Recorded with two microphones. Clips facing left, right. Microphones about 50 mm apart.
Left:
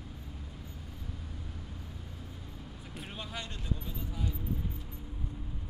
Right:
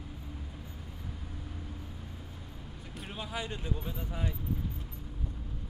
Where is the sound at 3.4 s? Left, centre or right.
Right.